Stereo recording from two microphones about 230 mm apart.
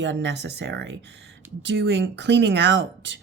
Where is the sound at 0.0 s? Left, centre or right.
Right.